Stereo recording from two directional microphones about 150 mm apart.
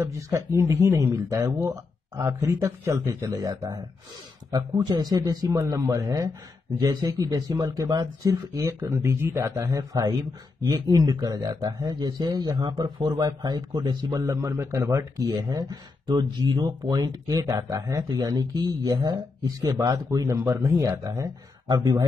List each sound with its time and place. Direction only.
0.0 s speech: 20° right (ahead or behind)